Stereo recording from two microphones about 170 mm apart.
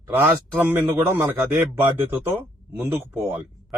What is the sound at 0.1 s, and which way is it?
A man's voice, 10° right (ahead or behind).